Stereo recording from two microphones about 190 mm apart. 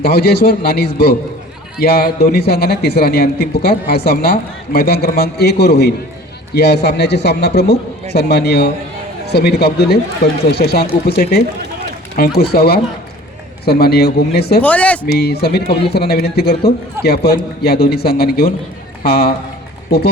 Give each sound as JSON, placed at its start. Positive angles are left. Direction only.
{"t": 0.0, "sound": "a man's voice", "side_deg": 55}
{"t": 12.4, "sound": "a man's voice", "side_deg": 55}
{"t": 14.6, "sound": "speech", "side_deg": 5}
{"t": 15.0, "sound": "a man's voice", "side_deg": 55}